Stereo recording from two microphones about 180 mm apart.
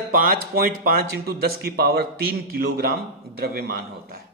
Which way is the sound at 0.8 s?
60° right (ahead or behind).